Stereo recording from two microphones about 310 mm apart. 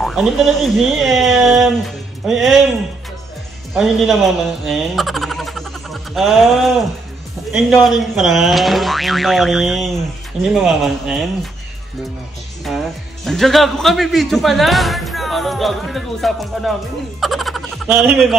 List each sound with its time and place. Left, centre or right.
0.0 s a man's voice: centre
3.7 s a man's voice: centre
12.6 s a man's voice: centre
17.2 s a sound: centre